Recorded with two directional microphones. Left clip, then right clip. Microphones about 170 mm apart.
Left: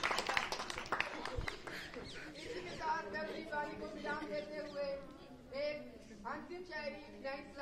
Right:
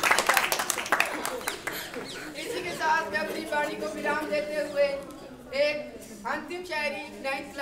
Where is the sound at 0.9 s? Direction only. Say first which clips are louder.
Right 13 dB; 90° right.